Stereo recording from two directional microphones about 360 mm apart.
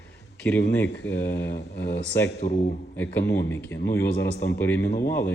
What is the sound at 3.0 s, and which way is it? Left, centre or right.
Speech, centre.